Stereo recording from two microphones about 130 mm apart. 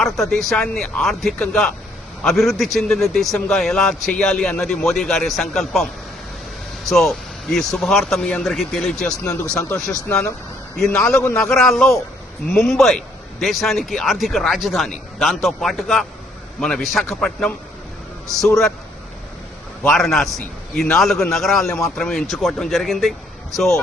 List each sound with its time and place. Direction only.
0.0 s a man's voice: 5° left (ahead or behind)
9.2 s speech: 25° left (ahead or behind)
10.8 s a man's voice: 5° left (ahead or behind)
19.8 s a man's voice: 5° left (ahead or behind)